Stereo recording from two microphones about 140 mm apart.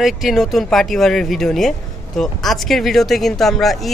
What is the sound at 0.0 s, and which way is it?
A woman's voice, centre (ahead or behind).